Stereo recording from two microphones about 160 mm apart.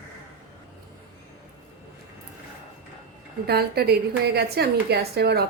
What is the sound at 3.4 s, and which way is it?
A woman's voice, 80° right.